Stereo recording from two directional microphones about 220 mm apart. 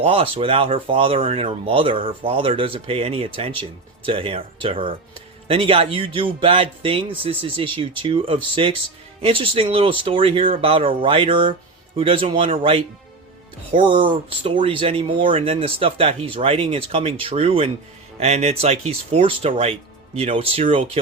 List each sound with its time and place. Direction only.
0.0 s speech: 25° right (ahead or behind)